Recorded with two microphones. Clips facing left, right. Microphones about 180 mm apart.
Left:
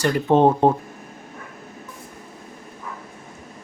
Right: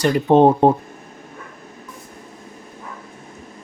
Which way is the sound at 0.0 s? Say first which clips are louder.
Right 3 dB; 20° right (ahead or behind).